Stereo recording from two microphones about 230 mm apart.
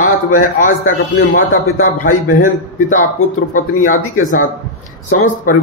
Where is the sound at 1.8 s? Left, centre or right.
Left.